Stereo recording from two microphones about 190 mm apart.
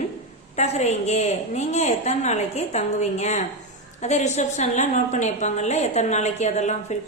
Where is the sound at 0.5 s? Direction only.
35° left (ahead or behind).